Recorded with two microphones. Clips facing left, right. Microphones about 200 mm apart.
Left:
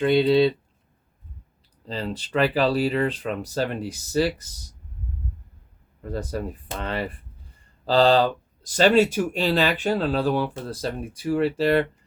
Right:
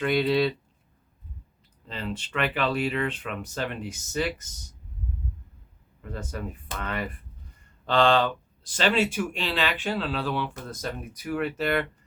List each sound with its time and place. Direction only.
0.0 s speech: 25° left (ahead or behind)
1.9 s speech: 35° left (ahead or behind)
6.0 s speech: 35° left (ahead or behind)